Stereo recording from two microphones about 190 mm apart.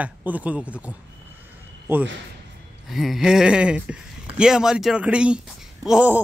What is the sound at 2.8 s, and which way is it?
Speech, centre (ahead or behind).